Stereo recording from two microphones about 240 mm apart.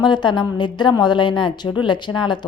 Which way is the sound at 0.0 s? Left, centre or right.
Centre.